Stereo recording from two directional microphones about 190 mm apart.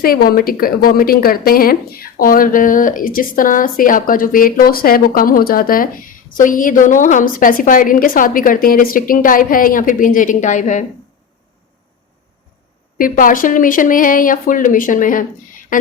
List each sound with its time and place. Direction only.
0.0 s a woman's voice: 50° left (ahead or behind)
13.0 s a woman's voice: 45° left (ahead or behind)